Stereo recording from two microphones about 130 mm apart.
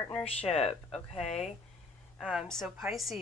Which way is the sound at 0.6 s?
50° left (ahead or behind).